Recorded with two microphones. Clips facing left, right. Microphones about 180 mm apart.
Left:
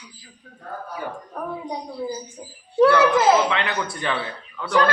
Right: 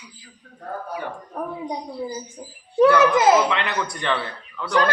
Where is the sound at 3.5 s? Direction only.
Centre (ahead or behind).